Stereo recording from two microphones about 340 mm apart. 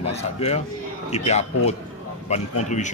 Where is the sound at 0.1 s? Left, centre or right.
Centre.